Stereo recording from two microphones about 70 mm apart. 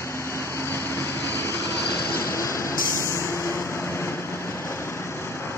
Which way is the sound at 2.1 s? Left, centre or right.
Left.